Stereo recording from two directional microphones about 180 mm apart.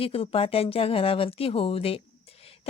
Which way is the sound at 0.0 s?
30° left (ahead or behind).